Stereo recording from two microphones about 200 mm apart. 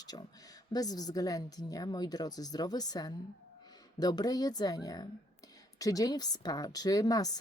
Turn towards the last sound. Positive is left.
turn(degrees=20)  # may be behind; listen again after turning